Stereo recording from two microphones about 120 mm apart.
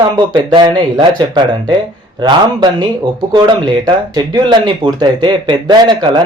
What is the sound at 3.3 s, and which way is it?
Speech, 40° right (ahead or behind).